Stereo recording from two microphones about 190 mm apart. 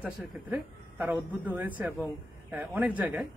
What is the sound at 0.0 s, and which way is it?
Speech, 10° right (ahead or behind).